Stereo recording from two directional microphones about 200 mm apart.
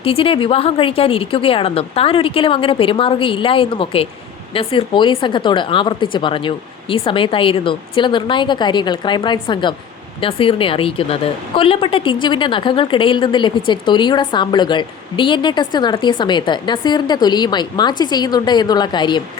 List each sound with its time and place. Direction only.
0.0 s a woman's voice: 30° left (ahead or behind)